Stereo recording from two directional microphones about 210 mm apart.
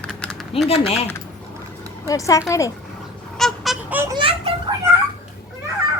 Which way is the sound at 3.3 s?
Centre (ahead or behind).